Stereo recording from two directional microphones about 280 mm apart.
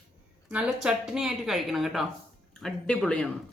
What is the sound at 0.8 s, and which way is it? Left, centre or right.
Speech, centre.